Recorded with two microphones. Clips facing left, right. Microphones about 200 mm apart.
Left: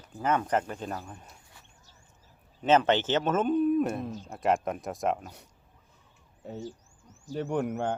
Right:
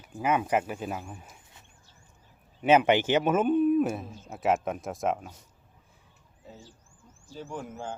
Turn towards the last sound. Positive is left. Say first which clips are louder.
# left 8 dB
turn(degrees=65)  # may be behind; listen again after turning